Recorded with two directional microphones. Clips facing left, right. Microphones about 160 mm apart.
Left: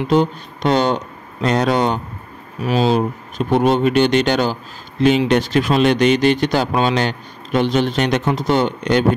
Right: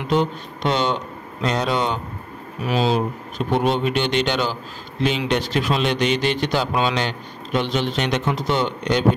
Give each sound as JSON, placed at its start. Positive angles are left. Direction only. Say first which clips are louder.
{"t": 0.0, "sound": "a man's voice", "louder": "left 4 dB", "side_deg": 40}